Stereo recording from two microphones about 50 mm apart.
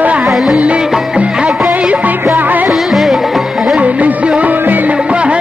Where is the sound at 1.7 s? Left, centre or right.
Right.